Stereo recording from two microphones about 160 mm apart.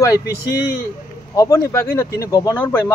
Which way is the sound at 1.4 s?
20° left (ahead or behind).